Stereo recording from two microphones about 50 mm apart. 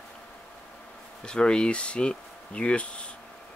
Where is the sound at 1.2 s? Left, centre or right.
Centre.